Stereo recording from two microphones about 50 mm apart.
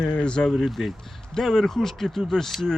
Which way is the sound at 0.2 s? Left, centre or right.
Centre.